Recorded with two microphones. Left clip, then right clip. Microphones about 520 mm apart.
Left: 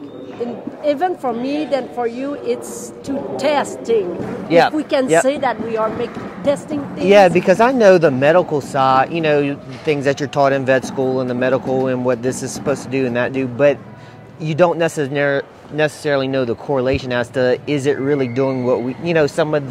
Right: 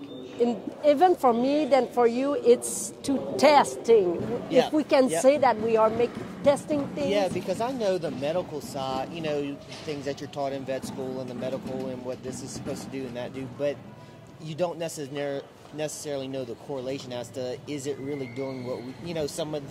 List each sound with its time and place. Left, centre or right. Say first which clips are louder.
0.4 s a sound: even; right
0.8 s a woman's voice: left 2 dB; right
4.5 s speech: left 11 dB; left
4.7 s speech: left 8 dB; right
6.4 s a woman's voice: left 4 dB; right
7.1 s speech: left 18 dB; left
12.1 s speech: left 16 dB; left